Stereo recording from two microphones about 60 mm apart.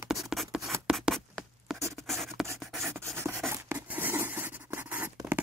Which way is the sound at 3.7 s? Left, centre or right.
Right.